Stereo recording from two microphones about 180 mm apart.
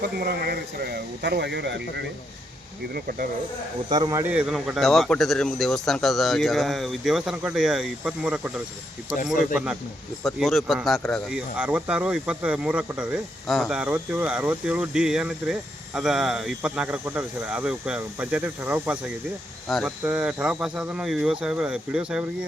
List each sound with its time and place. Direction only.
0.2 s speech: 60° right (ahead or behind)
2.9 s speech: 55° right (ahead or behind)
3.8 s a man's voice: 25° right (ahead or behind); by 22.3 s 5° right (ahead or behind)